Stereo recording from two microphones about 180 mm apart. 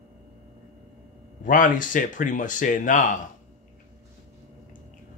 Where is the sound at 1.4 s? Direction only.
45° left (ahead or behind).